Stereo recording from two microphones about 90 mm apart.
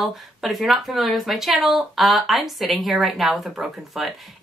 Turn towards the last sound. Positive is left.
turn(degrees=0)  # may be behind; listen again after turning